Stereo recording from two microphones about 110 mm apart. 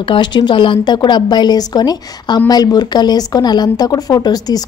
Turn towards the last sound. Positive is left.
turn(degrees=35)  # may be behind; listen again after turning